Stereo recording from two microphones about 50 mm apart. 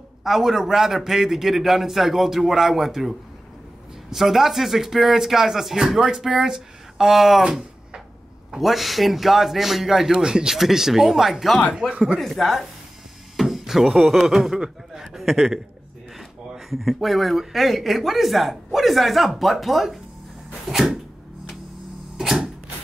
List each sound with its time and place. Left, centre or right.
0.2 s speech: centre
8.5 s speech: centre
11.8 s speech: centre
12.2 s speech: centre
20.7 s a sound: centre
22.1 s mechanisms: centre